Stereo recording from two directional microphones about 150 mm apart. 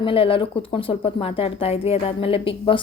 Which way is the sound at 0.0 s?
35° left (ahead or behind).